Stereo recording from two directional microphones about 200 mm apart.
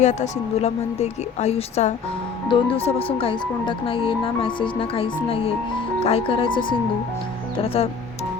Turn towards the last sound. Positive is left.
turn(degrees=30)  # may be behind; listen again after turning